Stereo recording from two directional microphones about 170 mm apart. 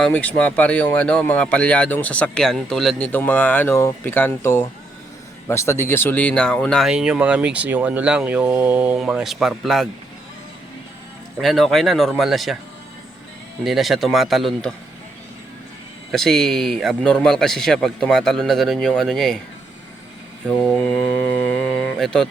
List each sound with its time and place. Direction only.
0.0 s speech: 10° left (ahead or behind)
11.3 s speech: centre (ahead or behind)
13.7 s speech: centre (ahead or behind)
16.1 s speech: centre (ahead or behind)
20.5 s speech: 5° left (ahead or behind)